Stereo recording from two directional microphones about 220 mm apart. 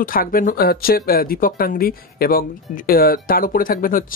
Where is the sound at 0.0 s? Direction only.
40° left (ahead or behind).